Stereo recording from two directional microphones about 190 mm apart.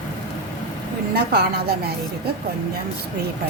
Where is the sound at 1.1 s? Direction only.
55° right (ahead or behind).